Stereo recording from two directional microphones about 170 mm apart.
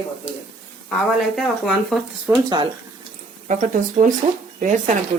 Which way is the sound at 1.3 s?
Centre (ahead or behind).